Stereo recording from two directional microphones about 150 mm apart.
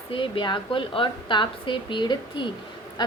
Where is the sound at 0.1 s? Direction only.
35° left (ahead or behind).